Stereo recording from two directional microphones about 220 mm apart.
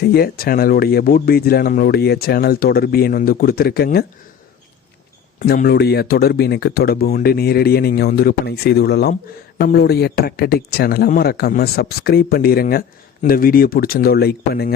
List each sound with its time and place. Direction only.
0.0 s speech: 45° left (ahead or behind)
5.4 s speech: 40° left (ahead or behind)